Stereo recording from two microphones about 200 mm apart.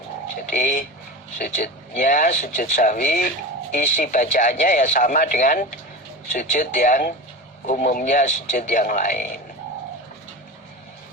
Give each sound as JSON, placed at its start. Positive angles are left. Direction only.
{"t": 0.3, "sound": "speech", "side_deg": 40}